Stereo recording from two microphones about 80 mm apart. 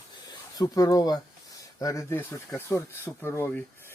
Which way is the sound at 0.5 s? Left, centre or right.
Left.